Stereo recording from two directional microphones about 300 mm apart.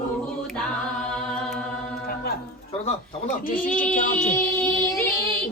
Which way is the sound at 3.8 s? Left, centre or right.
Left.